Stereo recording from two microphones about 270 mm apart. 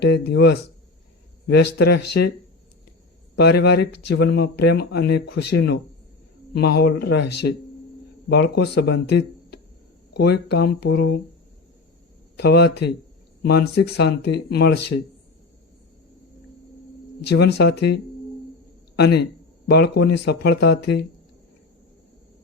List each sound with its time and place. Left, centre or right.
0.0 s speech: left
3.3 s speech: left
12.4 s speech: left
17.2 s speech: left